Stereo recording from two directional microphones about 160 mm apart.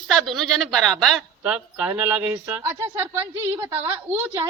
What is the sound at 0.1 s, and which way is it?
A woman's voice, centre (ahead or behind).